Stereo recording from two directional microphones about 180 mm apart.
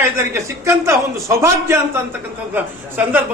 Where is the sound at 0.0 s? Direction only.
15° right (ahead or behind).